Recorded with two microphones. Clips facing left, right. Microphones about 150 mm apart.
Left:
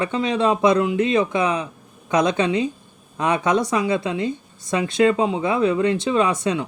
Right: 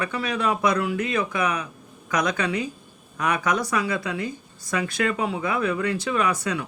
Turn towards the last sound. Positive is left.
turn(degrees=25)  # may be behind; listen again after turning